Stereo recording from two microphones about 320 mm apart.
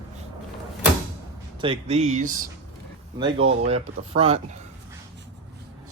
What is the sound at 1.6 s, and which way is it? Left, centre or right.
Speech, centre.